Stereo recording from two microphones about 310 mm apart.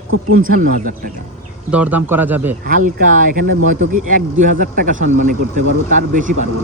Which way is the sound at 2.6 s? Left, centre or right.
Right.